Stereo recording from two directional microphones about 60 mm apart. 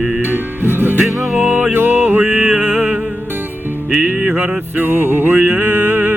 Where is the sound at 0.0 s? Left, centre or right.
Right.